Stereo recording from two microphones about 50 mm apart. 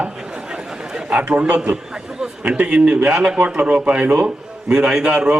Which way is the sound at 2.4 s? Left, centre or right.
Right.